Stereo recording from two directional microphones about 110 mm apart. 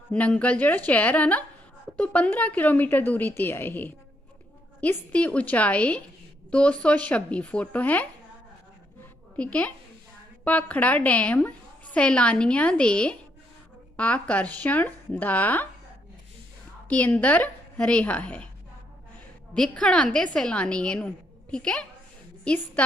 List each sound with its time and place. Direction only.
0.1 s a woman's voice: 10° left (ahead or behind)
9.3 s a woman's voice: 10° left (ahead or behind)
16.9 s a woman's voice: 15° left (ahead or behind)
19.5 s a woman's voice: 5° left (ahead or behind)